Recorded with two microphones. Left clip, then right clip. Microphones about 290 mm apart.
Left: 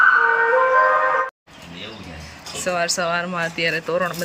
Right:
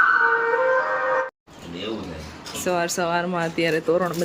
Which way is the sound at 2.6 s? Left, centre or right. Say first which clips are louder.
Left 2 dB; centre.